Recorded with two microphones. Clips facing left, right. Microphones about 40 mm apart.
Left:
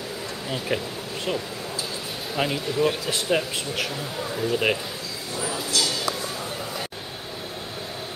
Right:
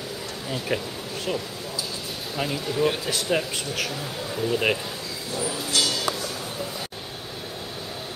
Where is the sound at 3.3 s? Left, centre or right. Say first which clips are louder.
Left 1 dB; centre.